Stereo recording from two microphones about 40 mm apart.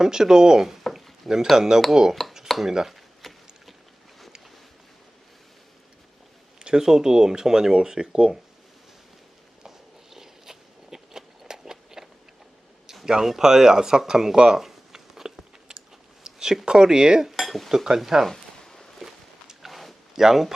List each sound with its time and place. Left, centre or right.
0.0 s speech: centre
3.2 s boat: centre
6.6 s speech: centre
9.6 s walk: centre
13.1 s speech: centre
14.3 s a sound: centre
15.7 s biting: right
16.2 s a sound: centre
16.6 s speech: centre
17.2 s speech: centre
17.8 s speech: centre
18.3 s a sound: centre
18.9 s walk: centre
20.1 s speech: centre